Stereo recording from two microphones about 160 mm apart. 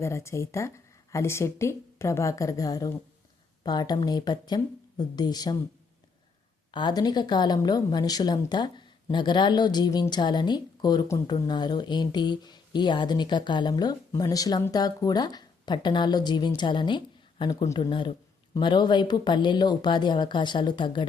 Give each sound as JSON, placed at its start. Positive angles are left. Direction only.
{"t": 0.0, "sound": "a woman's voice", "side_deg": 15}
{"t": 6.7, "sound": "a woman's voice", "side_deg": 30}